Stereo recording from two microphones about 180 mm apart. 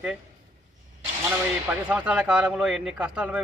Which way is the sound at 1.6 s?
10° right (ahead or behind).